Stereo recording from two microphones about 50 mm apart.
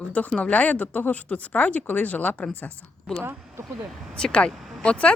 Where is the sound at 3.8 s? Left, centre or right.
Centre.